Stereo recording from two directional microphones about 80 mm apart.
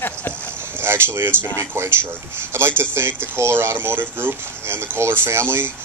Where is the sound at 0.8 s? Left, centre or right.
Right.